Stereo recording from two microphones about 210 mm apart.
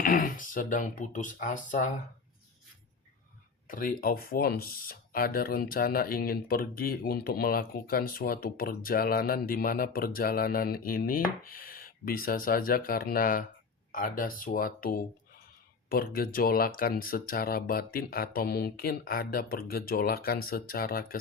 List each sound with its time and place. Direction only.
0.0 s speech: 40° left (ahead or behind)
3.7 s speech: 40° left (ahead or behind)